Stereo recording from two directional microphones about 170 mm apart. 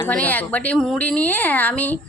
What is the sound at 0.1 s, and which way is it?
A woman's voice, 10° left (ahead or behind).